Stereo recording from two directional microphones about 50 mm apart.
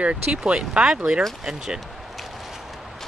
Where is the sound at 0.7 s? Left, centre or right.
Centre.